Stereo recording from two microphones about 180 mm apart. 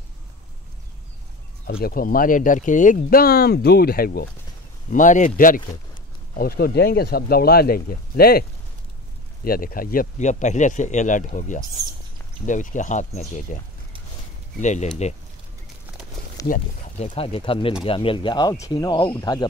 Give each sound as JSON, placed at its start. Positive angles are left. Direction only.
{"t": 1.7, "sound": "speech", "side_deg": 55}
{"t": 4.9, "sound": "speech", "side_deg": 45}
{"t": 6.3, "sound": "speech", "side_deg": 55}
{"t": 14.6, "sound": "speech", "side_deg": 40}
{"t": 16.4, "sound": "a sound", "side_deg": 20}
{"t": 17.0, "sound": "speech", "side_deg": 30}